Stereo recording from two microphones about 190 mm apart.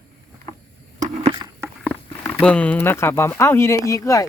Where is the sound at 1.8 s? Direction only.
10° left (ahead or behind).